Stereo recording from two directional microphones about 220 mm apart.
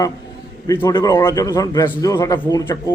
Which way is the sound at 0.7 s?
15° left (ahead or behind).